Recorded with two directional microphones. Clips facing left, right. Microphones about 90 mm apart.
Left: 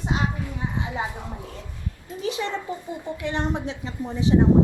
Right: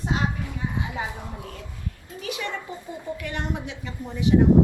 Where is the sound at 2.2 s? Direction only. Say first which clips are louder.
Left 4 dB; 30° left (ahead or behind).